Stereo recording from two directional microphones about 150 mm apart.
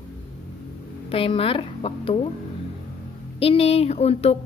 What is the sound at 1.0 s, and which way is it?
Speech, 40° left (ahead or behind).